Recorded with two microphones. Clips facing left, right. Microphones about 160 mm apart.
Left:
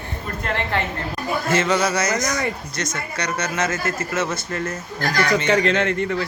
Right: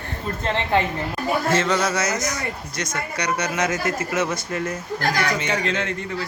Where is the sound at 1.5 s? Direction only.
Centre (ahead or behind).